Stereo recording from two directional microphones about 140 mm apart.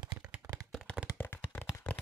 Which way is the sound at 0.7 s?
5° left (ahead or behind).